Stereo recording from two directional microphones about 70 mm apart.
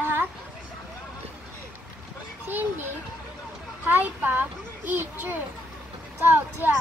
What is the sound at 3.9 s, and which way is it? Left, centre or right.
A child's voice, right.